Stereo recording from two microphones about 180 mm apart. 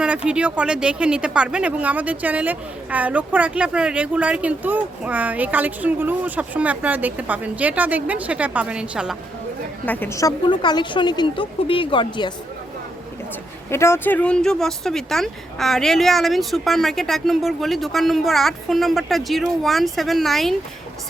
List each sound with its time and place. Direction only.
0.3 s speech: 5° right (ahead or behind)
9.8 s a woman's voice: 10° left (ahead or behind); by 12.3 s 25° left (ahead or behind)
13.7 s speech: 15° left (ahead or behind)